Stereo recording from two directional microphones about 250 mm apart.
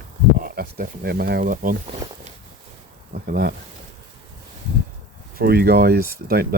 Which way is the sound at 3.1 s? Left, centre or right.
Right.